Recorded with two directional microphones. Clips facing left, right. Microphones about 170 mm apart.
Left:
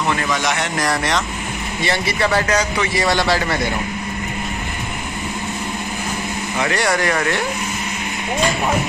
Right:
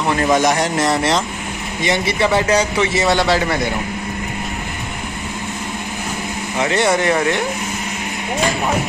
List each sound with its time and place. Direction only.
0.3 s a man's voice: 45° right (ahead or behind)
0.7 s a man's voice: 25° right (ahead or behind)
6.6 s a man's voice: 25° right (ahead or behind)